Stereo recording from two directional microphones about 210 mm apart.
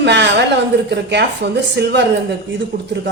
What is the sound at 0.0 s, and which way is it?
A woman's voice, 55° right (ahead or behind).